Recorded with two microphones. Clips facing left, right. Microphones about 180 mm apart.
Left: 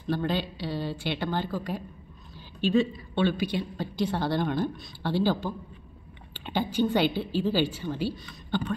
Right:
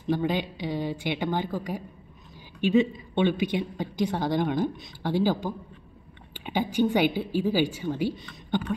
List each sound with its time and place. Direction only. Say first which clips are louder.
0.0 s a woman's voice: right 2 dB; 15° right (ahead or behind)